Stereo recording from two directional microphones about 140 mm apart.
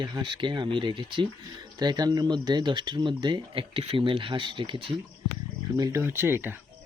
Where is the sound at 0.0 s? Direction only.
35° right (ahead or behind).